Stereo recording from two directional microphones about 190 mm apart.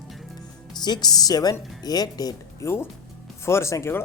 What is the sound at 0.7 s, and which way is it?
Speech, 20° left (ahead or behind).